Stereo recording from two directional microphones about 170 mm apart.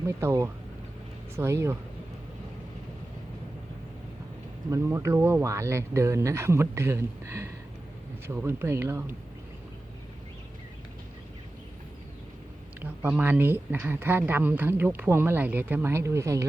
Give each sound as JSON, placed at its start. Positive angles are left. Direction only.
{"t": 0.1, "sound": "speech", "side_deg": -15}
{"t": 4.7, "sound": "speech", "side_deg": -15}
{"t": 12.8, "sound": "speech", "side_deg": -10}